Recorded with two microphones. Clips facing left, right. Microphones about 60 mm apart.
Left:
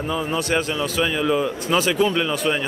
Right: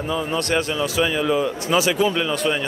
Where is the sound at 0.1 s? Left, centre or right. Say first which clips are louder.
Right 1 dB; centre.